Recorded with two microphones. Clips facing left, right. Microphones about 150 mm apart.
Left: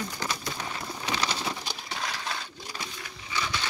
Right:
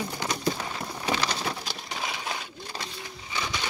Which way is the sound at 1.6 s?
Centre (ahead or behind).